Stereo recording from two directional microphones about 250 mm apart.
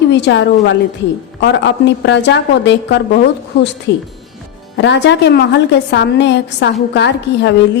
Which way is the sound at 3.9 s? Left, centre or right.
Left.